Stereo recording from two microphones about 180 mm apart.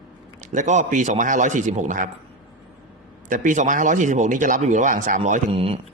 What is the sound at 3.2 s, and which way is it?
Speech, 45° right (ahead or behind).